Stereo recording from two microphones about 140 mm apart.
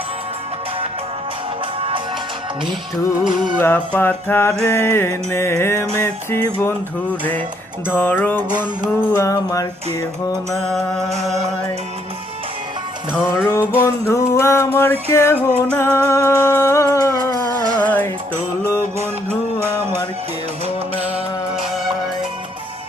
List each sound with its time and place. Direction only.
3.6 s music: 15° left (ahead or behind)
7.9 s music: 15° left (ahead or behind)
10.5 s music: centre (ahead or behind)
13.3 s music: 20° left (ahead or behind)
17.7 s music: 10° left (ahead or behind)
19.5 s music: 15° right (ahead or behind)